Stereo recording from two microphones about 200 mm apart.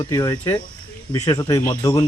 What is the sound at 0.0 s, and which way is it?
Speech, 15° left (ahead or behind).